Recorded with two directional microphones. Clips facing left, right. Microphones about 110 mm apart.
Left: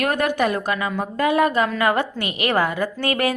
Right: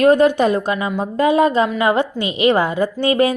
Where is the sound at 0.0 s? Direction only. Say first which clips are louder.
Right 8 dB; 25° right (ahead or behind).